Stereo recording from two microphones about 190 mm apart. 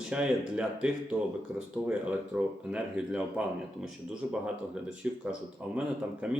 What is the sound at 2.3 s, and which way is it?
Speech, 10° right (ahead or behind).